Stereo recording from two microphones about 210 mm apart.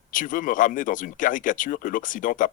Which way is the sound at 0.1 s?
40° left (ahead or behind).